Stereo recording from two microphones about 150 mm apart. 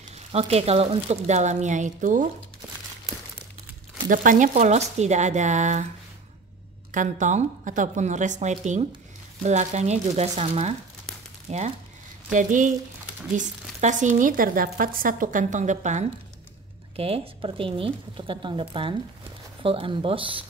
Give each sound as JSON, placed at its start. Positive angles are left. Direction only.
{"t": 0.3, "sound": "speech", "side_deg": -45}
{"t": 4.1, "sound": "speech", "side_deg": -60}
{"t": 6.9, "sound": "speech", "side_deg": -55}
{"t": 12.3, "sound": "speech", "side_deg": -60}
{"t": 16.9, "sound": "speech", "side_deg": -40}